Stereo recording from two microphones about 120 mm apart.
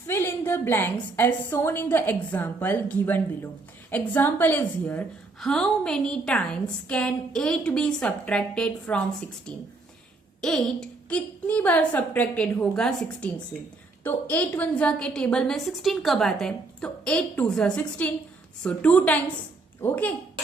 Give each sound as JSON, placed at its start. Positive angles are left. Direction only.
{"t": 0.1, "sound": "a woman's voice", "side_deg": 20}
{"t": 10.4, "sound": "a woman's voice", "side_deg": 5}